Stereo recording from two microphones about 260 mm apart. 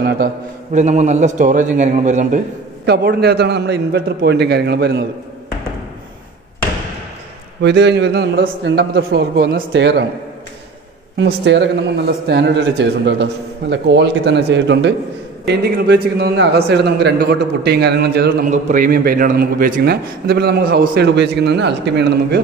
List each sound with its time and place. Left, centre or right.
0.7 s a man's voice: right
7.6 s a man's voice: right
11.1 s a man's voice: right